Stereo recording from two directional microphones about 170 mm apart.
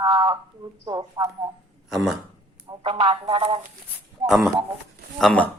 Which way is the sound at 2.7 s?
30° right (ahead or behind).